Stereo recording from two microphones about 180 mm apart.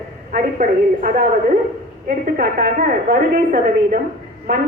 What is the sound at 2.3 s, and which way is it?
A woman's voice, 50° right (ahead or behind).